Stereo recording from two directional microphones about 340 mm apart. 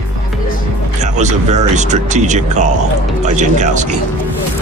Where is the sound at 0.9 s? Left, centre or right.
Right.